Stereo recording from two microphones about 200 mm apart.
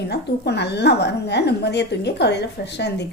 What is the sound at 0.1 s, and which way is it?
A woman's voice, 55° left (ahead or behind).